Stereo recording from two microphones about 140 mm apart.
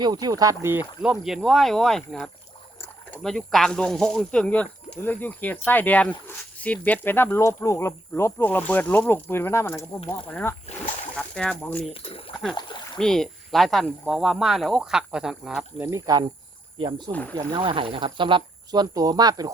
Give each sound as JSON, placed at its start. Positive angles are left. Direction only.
{"t": 0.0, "sound": "speech", "side_deg": -30}
{"t": 1.0, "sound": "speech", "side_deg": -5}
{"t": 12.5, "sound": "speech", "side_deg": 35}
{"t": 13.0, "sound": "speech", "side_deg": 5}
{"t": 15.8, "sound": "speech", "side_deg": -25}
{"t": 17.1, "sound": "speech", "side_deg": 10}
{"t": 17.3, "sound": "speech", "side_deg": -35}